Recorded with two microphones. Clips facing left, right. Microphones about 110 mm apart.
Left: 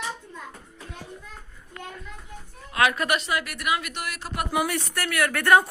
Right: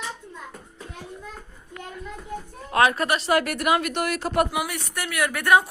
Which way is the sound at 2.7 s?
35° right (ahead or behind).